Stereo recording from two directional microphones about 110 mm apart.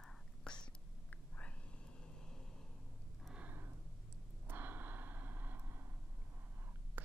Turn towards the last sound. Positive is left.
turn(degrees=-20)  # may be behind; listen again after turning